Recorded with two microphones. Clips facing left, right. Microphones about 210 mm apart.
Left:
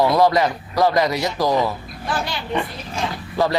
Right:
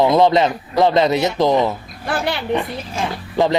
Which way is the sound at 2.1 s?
60° right (ahead or behind).